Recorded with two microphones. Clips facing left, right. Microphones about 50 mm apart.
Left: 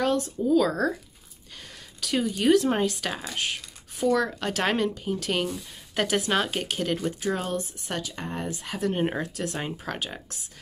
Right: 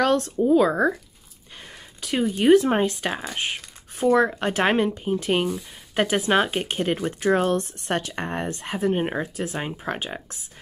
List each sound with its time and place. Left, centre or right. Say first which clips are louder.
0.0 s speech: right 4 dB; right
0.5 s speech: right 4 dB; right
2.0 s speech: right 3 dB; right
7.1 s speech: right 7 dB; right
8.6 s speech: right 3 dB; right